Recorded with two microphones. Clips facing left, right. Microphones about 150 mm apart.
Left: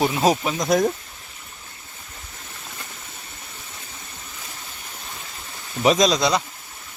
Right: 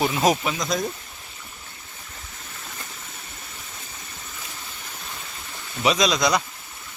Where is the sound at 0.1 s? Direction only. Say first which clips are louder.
Left 1 dB; 25° left (ahead or behind).